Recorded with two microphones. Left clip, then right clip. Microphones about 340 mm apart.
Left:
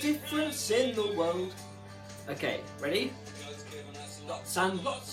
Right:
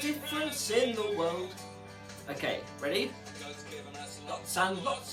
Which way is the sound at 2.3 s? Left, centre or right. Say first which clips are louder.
Even; centre.